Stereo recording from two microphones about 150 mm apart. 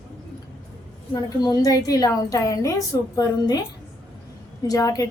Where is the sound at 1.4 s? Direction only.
25° left (ahead or behind).